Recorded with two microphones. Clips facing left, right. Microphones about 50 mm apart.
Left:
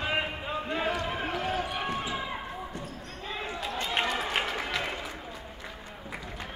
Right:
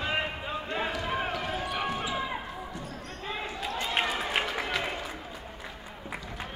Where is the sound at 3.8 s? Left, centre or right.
Centre.